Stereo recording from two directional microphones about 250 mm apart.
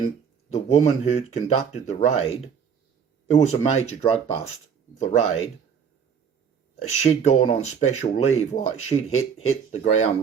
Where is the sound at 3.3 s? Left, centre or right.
Left.